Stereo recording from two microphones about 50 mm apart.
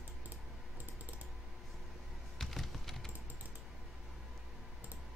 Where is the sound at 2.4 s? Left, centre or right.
Centre.